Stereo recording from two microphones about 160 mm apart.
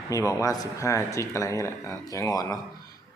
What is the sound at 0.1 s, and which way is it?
Speech, 20° left (ahead or behind).